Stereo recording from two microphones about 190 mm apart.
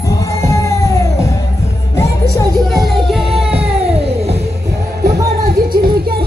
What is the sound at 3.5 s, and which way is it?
Music, 30° right (ahead or behind).